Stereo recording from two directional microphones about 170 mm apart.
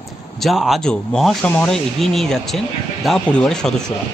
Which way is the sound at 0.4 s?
Centre (ahead or behind).